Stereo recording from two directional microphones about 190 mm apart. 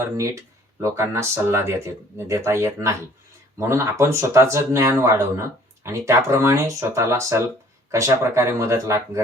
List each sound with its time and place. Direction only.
0.2 s speech: 15° right (ahead or behind)